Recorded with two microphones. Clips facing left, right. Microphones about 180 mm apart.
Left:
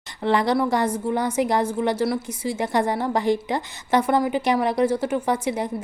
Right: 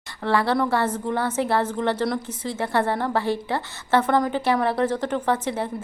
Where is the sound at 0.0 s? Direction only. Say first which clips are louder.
Left 1 dB; 20° left (ahead or behind).